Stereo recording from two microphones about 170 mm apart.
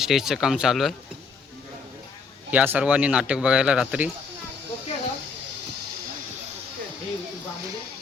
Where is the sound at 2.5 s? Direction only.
10° right (ahead or behind).